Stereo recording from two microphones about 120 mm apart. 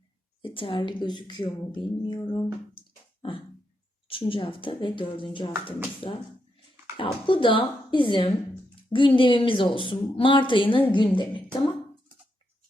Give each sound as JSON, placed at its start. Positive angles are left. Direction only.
{"t": 0.4, "sound": "speech", "side_deg": 45}
{"t": 2.1, "sound": "speech", "side_deg": 25}
{"t": 2.7, "sound": "a sound", "side_deg": 45}
{"t": 4.1, "sound": "speech", "side_deg": 45}